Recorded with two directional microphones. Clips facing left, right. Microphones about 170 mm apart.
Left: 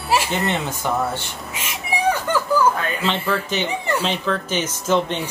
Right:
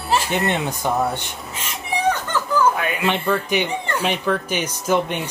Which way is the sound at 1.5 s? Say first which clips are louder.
Even; 10° left (ahead or behind).